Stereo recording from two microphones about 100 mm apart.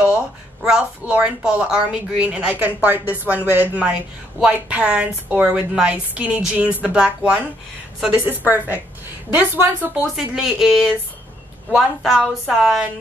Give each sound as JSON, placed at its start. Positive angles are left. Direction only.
{"t": 0.0, "sound": "speech", "side_deg": -10}
{"t": 9.9, "sound": "a woman's voice", "side_deg": -5}